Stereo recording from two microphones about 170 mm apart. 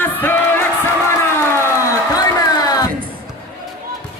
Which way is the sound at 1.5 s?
15° left (ahead or behind).